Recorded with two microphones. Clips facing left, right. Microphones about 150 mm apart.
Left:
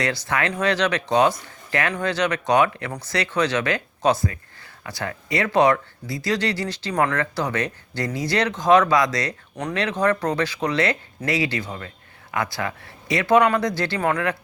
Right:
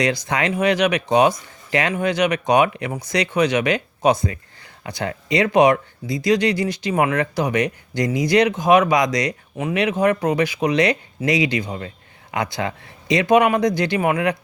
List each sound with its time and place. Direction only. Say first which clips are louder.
0.0 s speech: right 3 dB; 15° right (ahead or behind)
9.6 s speech: right 4 dB; 5° right (ahead or behind)